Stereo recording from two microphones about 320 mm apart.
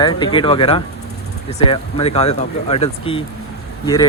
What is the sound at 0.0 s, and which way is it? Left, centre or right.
Speech, centre.